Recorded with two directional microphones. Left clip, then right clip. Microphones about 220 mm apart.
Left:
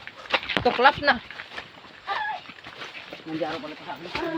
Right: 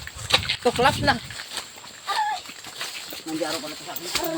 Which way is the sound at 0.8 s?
15° left (ahead or behind).